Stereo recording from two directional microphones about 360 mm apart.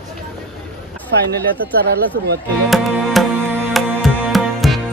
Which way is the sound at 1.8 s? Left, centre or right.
Right.